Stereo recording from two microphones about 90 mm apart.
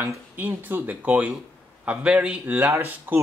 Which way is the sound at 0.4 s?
20° right (ahead or behind).